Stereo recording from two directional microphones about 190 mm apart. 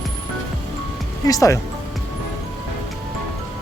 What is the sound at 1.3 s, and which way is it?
Speech, 15° left (ahead or behind).